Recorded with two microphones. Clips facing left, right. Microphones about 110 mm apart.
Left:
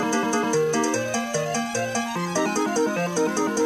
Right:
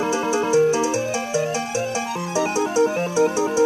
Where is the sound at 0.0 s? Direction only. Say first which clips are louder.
Right 2 dB; 25° right (ahead or behind).